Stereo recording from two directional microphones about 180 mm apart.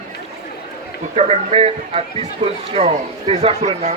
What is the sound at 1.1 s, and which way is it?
Speech, 35° right (ahead or behind).